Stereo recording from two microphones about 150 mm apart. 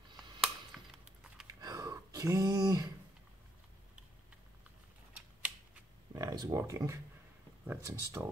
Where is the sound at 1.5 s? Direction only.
25° right (ahead or behind).